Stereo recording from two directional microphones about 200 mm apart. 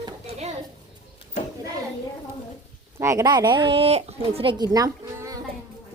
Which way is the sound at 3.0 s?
15° right (ahead or behind).